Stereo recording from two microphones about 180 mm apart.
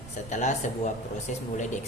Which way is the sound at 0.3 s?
40° left (ahead or behind).